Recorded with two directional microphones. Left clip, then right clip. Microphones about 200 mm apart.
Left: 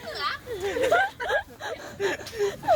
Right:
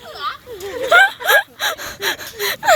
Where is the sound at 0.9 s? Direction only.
15° right (ahead or behind).